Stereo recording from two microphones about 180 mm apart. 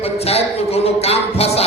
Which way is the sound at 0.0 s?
35° left (ahead or behind).